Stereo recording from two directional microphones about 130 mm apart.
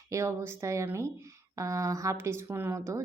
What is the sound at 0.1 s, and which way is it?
A woman's voice, 20° right (ahead or behind).